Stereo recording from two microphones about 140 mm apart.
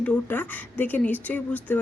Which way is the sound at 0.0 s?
10° left (ahead or behind).